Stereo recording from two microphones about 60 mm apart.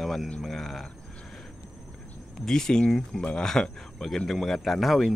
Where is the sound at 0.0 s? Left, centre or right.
Centre.